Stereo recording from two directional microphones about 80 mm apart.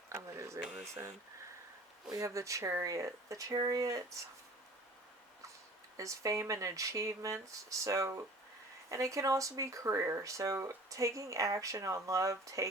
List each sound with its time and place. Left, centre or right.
0.1 s a sound: right
2.1 s speech: right
3.5 s speech: right
3.8 s speech: right
6.0 s speech: right